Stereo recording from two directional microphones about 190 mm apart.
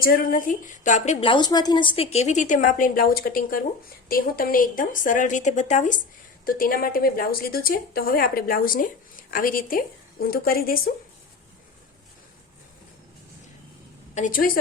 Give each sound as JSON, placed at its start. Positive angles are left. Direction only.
{"t": 0.0, "sound": "a woman's voice", "side_deg": 50}
{"t": 14.2, "sound": "a woman's voice", "side_deg": 45}